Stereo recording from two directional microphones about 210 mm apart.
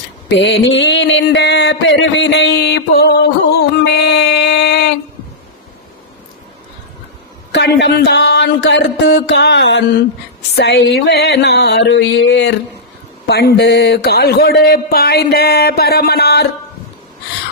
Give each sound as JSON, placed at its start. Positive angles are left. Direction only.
{"t": 0.3, "sound": "mantra", "side_deg": 55}
{"t": 3.6, "sound": "a sound", "side_deg": 50}
{"t": 7.5, "sound": "mantra", "side_deg": 55}
{"t": 10.5, "sound": "speech", "side_deg": 50}